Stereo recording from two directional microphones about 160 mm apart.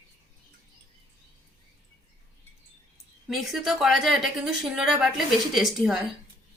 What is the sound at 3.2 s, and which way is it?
A woman's voice, centre (ahead or behind).